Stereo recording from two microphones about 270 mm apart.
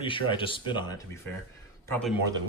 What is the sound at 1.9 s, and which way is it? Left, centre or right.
Speech, centre.